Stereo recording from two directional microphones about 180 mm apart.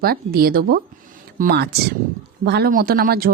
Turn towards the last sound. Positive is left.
turn(degrees=-55)  # may be behind; listen again after turning